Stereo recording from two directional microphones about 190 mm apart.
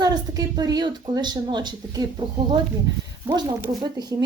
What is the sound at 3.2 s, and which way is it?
Speech, 20° right (ahead or behind).